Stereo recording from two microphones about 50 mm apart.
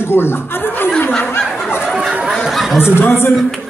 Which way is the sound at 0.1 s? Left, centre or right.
Left.